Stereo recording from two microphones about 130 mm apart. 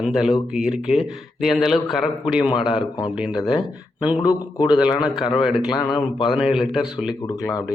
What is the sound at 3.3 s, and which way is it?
A man's voice, 30° left (ahead or behind).